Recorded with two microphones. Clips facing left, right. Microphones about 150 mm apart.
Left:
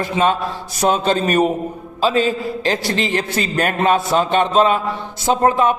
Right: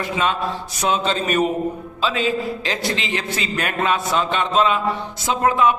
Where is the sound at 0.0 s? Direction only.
40° left (ahead or behind).